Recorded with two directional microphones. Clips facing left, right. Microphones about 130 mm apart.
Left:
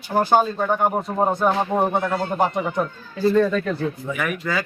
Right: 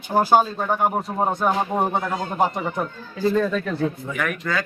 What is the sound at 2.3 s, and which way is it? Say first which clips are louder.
A man's voice: right 1 dB; centre (ahead or behind).